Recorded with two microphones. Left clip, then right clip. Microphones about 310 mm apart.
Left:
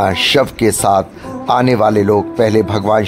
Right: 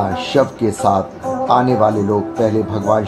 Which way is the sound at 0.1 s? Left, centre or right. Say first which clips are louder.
Left 3 dB; left.